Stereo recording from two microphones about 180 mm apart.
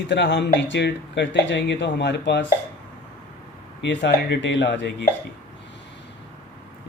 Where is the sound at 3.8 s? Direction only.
70° left (ahead or behind).